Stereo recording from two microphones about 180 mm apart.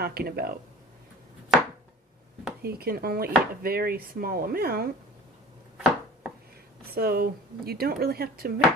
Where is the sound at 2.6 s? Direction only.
60° right (ahead or behind).